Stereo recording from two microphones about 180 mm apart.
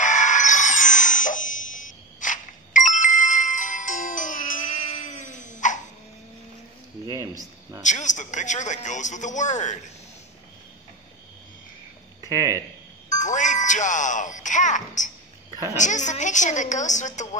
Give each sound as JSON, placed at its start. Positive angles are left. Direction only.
{"t": 0.0, "sound": "a sound", "side_deg": 45}
{"t": 7.1, "sound": "speech", "side_deg": -20}
{"t": 7.8, "sound": "a man's voice", "side_deg": 45}
{"t": 12.2, "sound": "speech", "side_deg": -20}
{"t": 13.1, "sound": "a man's voice", "side_deg": 45}